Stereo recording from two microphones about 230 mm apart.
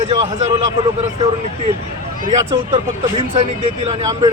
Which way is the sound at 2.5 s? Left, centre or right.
Centre.